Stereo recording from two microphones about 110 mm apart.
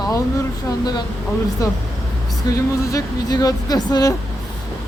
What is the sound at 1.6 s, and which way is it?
Speech, 35° left (ahead or behind).